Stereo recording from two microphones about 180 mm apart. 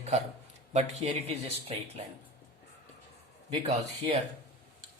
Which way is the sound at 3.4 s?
30° right (ahead or behind).